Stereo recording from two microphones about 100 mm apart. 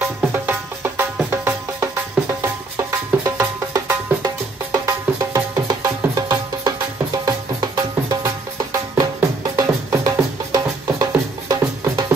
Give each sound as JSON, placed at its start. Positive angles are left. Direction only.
{"t": 0.3, "sound": "music", "side_deg": -20}